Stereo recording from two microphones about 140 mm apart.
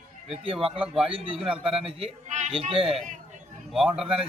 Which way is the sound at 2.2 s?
60° right (ahead or behind).